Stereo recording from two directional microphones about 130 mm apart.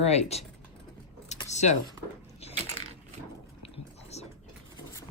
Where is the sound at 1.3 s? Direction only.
60° left (ahead or behind).